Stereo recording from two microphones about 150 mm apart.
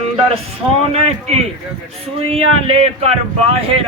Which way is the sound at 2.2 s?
40° right (ahead or behind).